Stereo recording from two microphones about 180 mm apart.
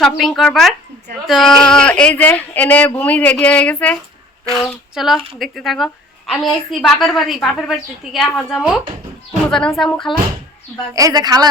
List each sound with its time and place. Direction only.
0.0 s a woman's voice: centre (ahead or behind)
4.6 s a sound: centre (ahead or behind)
5.4 s a woman's voice: centre (ahead or behind)
10.9 s a woman's voice: 20° right (ahead or behind)